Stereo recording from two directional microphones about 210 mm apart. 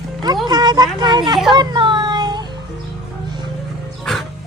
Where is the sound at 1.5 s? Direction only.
20° right (ahead or behind).